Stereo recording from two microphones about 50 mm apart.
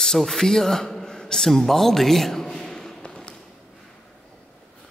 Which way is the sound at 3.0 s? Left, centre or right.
Centre.